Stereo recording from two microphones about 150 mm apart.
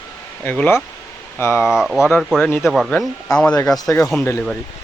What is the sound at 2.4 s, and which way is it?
Speech, 10° left (ahead or behind).